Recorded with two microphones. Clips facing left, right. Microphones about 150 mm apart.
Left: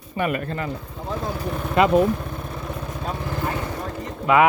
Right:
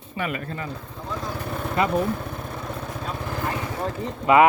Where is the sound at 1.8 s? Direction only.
85° left.